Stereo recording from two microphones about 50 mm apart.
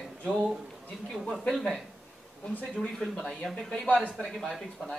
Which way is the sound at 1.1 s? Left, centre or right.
Centre.